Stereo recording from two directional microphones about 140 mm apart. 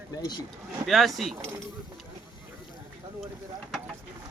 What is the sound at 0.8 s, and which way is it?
Speech, centre (ahead or behind).